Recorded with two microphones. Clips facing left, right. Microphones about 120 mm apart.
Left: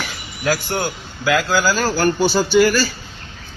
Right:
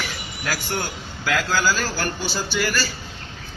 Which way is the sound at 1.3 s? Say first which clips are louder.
Left 5 dB; 50° left (ahead or behind).